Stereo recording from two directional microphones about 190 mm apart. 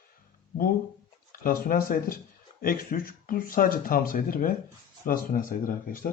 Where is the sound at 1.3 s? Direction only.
50° left (ahead or behind).